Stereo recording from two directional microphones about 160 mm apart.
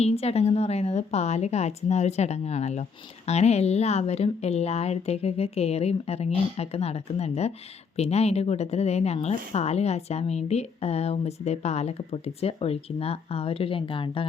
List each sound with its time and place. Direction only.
0.0 s a woman's voice: 40° left (ahead or behind)